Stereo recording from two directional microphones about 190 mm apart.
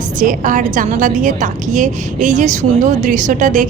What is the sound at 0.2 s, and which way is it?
A woman's voice, 45° right (ahead or behind).